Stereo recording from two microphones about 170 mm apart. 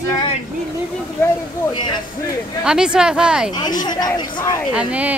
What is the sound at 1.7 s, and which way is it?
Speech, 30° left (ahead or behind).